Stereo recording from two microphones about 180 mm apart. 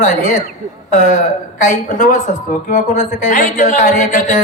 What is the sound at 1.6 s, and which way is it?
A woman's voice, 45° left (ahead or behind).